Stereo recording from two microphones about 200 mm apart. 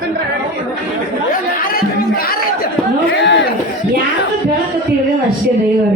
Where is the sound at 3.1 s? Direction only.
60° left (ahead or behind).